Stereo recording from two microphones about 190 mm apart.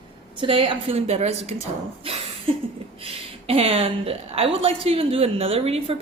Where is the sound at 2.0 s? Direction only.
30° right (ahead or behind).